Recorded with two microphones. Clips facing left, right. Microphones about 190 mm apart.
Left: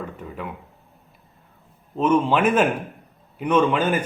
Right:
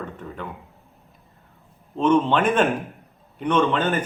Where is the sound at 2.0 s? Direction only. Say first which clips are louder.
Even; 10° left (ahead or behind).